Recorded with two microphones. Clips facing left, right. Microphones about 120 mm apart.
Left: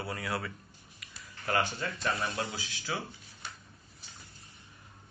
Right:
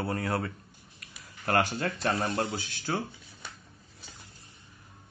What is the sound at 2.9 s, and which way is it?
Speech, 45° right (ahead or behind).